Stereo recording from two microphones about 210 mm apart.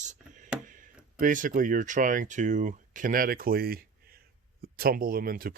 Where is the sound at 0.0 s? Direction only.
35° right (ahead or behind).